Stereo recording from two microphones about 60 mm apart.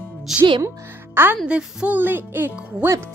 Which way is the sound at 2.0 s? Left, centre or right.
Right.